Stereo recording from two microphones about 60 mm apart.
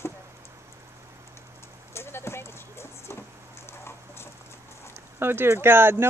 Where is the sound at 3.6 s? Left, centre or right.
Left.